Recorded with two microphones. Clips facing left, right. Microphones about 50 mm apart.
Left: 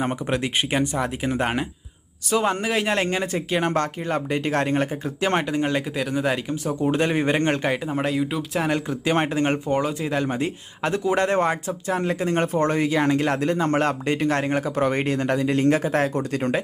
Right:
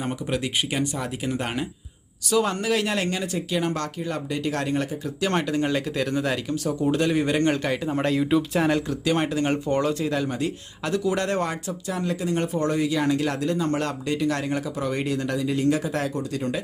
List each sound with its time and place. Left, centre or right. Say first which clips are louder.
0.0 s speech: left 3 dB; left
7.5 s speech: left 1 dB; centre
8.9 s speech: left 1 dB; left
9.5 s speech: even; centre; by 11.7 s left
11.9 s speech: left 3 dB; left